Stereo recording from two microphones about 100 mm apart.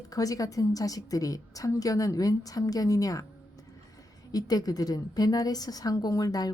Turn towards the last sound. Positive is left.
turn(degrees=40)  # may be behind; listen again after turning